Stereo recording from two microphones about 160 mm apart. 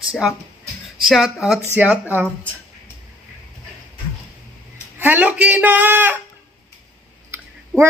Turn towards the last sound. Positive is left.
turn(degrees=-15)  # may be behind; listen again after turning